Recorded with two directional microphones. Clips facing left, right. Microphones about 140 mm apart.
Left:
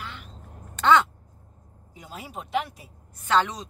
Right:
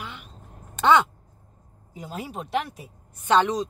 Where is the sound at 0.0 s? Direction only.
15° right (ahead or behind).